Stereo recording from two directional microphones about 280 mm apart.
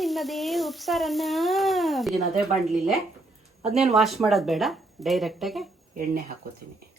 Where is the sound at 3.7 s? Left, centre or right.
Centre.